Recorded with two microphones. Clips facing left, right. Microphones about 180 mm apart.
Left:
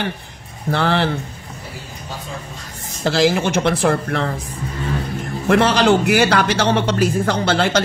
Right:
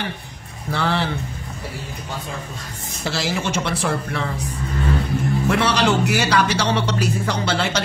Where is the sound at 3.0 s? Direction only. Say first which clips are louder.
Left 8 dB; 55° left (ahead or behind).